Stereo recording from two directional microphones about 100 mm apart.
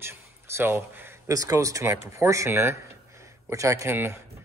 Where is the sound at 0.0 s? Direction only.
25° right (ahead or behind).